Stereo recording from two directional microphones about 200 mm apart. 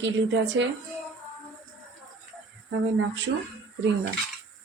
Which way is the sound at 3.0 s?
65° right (ahead or behind).